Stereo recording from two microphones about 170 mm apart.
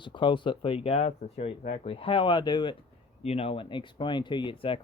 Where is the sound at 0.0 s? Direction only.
30° left (ahead or behind).